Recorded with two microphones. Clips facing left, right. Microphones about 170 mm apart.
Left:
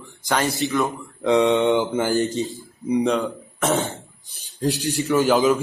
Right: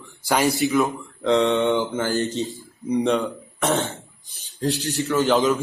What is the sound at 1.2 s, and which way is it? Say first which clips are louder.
Mantra: left 2 dB; 15° left (ahead or behind).